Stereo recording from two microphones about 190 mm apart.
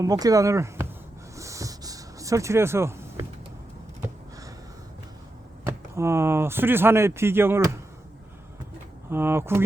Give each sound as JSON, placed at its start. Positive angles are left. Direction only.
{"t": 0.0, "sound": "speech", "side_deg": -20}
{"t": 1.4, "sound": "a sound", "side_deg": -15}
{"t": 5.6, "sound": "speech", "side_deg": -15}
{"t": 9.0, "sound": "speech", "side_deg": -10}